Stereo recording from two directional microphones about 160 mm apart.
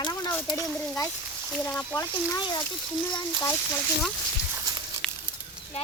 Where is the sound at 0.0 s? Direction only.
25° left (ahead or behind).